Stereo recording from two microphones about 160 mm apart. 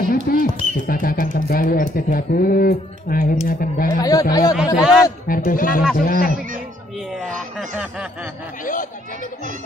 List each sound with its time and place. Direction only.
0.1 s speech: 60° left (ahead or behind)
3.9 s speech: 20° left (ahead or behind)
4.7 s a man's voice: centre (ahead or behind)
5.3 s speech: 60° left (ahead or behind)
7.2 s a sound: 5° left (ahead or behind)
7.7 s snicker: 5° right (ahead or behind)